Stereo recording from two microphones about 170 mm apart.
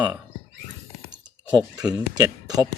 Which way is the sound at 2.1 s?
20° right (ahead or behind).